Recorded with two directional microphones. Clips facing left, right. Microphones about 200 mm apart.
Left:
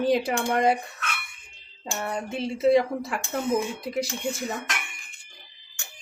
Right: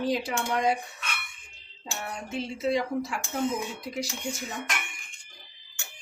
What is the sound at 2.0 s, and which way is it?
Speech, 55° left (ahead or behind).